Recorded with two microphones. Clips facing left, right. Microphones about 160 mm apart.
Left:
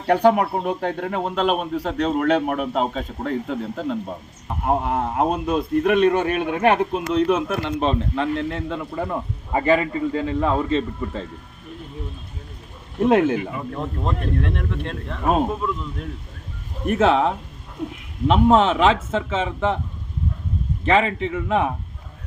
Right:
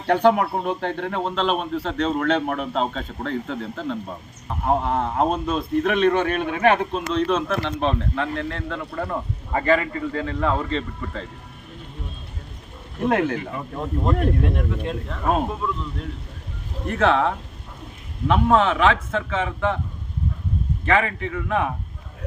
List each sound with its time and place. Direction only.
0.1 s speech: 5° left (ahead or behind)
13.1 s a man's voice: 20° left (ahead or behind)
14.5 s speech: 5° right (ahead or behind)
16.8 s a man's voice: 20° left (ahead or behind)
20.8 s a man's voice: 20° left (ahead or behind)